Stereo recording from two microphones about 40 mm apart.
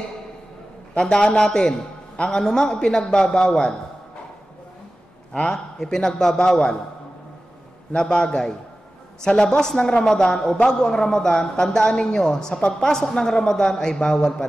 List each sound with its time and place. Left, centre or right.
0.9 s a man's voice: centre
5.5 s a man's voice: centre
7.9 s a man's voice: centre